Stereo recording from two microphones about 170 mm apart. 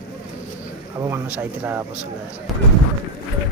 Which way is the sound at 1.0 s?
10° right (ahead or behind).